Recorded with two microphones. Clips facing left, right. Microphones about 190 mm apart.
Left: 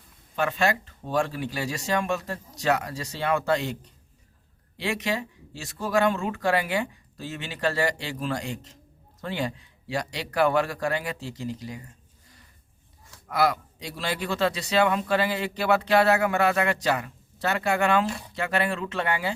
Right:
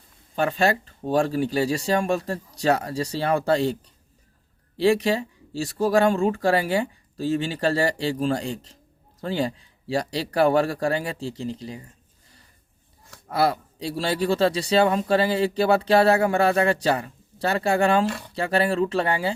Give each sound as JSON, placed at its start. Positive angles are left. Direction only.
{"t": 0.3, "sound": "a man's voice", "side_deg": -35}
{"t": 4.8, "sound": "a man's voice", "side_deg": -30}
{"t": 13.2, "sound": "a man's voice", "side_deg": -30}